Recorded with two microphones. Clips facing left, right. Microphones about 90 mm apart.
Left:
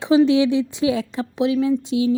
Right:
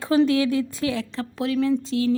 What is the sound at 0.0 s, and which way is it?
A woman's voice, 20° left (ahead or behind).